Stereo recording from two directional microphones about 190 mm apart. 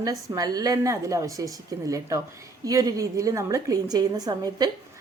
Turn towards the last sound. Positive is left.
turn(degrees=-20)  # may be behind; listen again after turning